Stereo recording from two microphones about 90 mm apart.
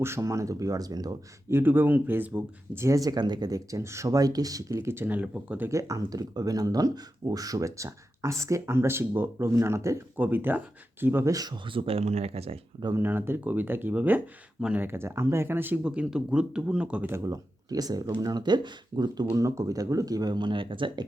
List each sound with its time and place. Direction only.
0.0 s speech: 30° right (ahead or behind)
1.5 s speech: 25° right (ahead or behind)
2.8 s speech: 40° right (ahead or behind); by 5.6 s 15° right (ahead or behind)
5.6 s speech: 35° right (ahead or behind)
10.2 s speech: 20° right (ahead or behind)
11.3 s speech: 45° right (ahead or behind)
11.6 s speech: 80° right
13.0 s speech: 25° right (ahead or behind)
17.1 s speech: 35° right (ahead or behind); by 19.3 s 50° right (ahead or behind)
19.3 s speech: 35° right (ahead or behind); by 21.0 s 70° right (ahead or behind)